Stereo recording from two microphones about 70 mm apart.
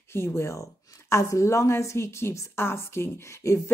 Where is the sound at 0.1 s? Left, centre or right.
Left.